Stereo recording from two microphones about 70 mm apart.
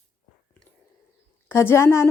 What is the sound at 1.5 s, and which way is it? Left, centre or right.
Speech, left.